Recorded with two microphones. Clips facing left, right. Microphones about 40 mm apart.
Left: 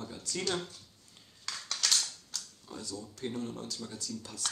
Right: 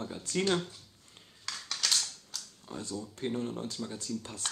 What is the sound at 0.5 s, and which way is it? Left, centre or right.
Mechanisms, centre.